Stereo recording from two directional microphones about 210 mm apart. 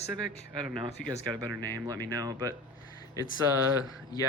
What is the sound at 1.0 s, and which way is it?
Speech, 5° left (ahead or behind).